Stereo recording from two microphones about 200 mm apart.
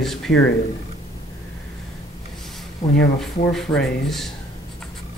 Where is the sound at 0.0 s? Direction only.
Centre (ahead or behind).